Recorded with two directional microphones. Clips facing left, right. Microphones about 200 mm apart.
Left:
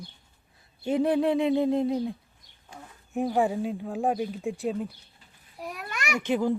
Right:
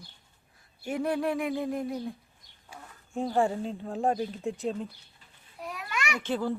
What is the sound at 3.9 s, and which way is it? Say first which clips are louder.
A child's voice: right 1 dB; centre (ahead or behind).